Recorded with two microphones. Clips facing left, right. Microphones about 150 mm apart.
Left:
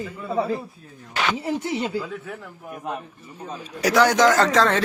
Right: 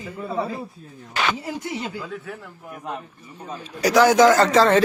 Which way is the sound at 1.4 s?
25° left (ahead or behind).